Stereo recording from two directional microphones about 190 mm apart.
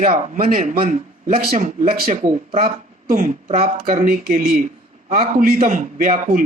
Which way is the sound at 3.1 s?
40° right (ahead or behind).